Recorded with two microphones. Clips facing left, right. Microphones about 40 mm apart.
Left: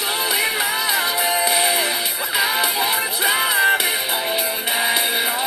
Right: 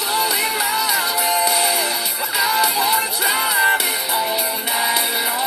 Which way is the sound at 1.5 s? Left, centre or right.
Left.